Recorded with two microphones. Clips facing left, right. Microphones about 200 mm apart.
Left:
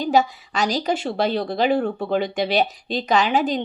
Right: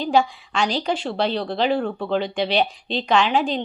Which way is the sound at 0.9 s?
5° left (ahead or behind).